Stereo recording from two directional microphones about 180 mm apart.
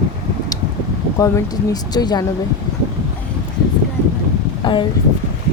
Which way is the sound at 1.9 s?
20° left (ahead or behind).